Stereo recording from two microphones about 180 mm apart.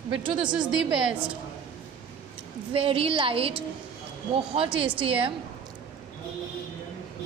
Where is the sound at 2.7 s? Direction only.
30° right (ahead or behind).